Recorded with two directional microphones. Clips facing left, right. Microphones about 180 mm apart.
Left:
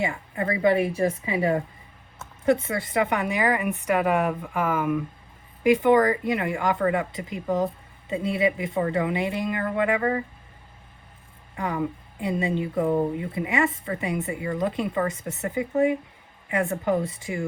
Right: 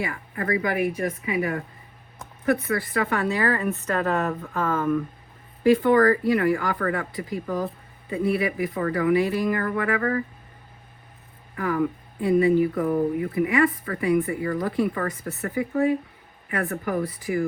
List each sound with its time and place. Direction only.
0.0 s a woman's voice: 25° left (ahead or behind)
11.5 s speech: 25° left (ahead or behind)